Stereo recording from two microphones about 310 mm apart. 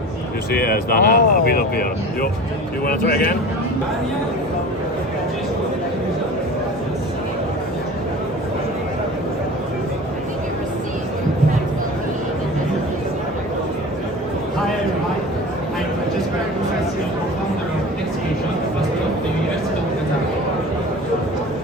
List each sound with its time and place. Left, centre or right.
0.5 s speech: left